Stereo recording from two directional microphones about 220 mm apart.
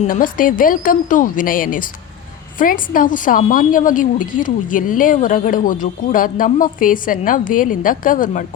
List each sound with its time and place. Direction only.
0.0 s a woman's voice: 40° left (ahead or behind)